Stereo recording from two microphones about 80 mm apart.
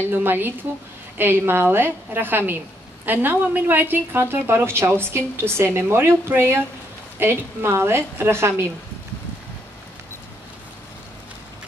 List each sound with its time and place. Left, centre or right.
0.1 s a woman's voice: right